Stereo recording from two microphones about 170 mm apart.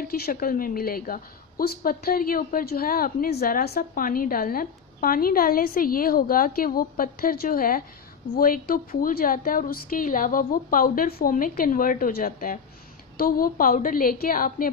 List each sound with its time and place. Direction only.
0.0 s a woman's voice: 60° left (ahead or behind)